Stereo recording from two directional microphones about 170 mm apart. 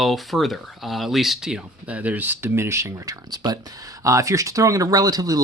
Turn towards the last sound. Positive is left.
turn(degrees=-20)  # may be behind; listen again after turning